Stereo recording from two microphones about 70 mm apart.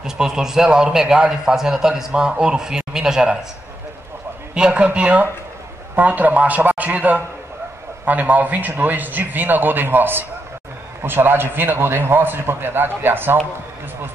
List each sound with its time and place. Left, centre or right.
0.0 s a man's voice: centre
4.6 s a man's voice: centre; by 13.4 s right